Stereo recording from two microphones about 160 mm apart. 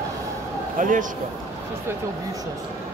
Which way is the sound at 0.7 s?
55° right (ahead or behind).